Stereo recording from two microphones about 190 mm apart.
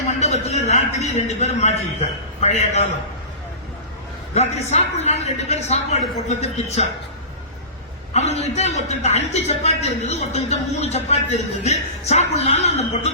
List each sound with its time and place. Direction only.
0.2 s a man's voice: 35° left (ahead or behind)
4.4 s a man's voice: 35° left (ahead or behind)
8.1 s a man's voice: 35° left (ahead or behind)